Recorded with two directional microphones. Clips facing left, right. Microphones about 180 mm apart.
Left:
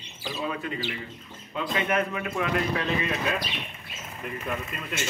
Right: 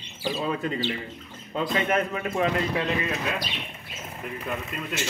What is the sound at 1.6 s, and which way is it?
Speech, 35° right (ahead or behind).